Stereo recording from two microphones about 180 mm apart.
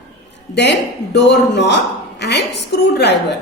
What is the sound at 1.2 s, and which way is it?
A woman's voice, 75° left (ahead or behind).